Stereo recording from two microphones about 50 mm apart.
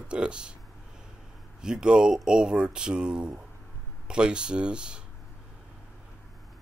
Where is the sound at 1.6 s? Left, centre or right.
Centre.